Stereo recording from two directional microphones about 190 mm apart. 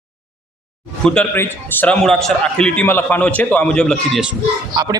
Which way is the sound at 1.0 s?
5° left (ahead or behind).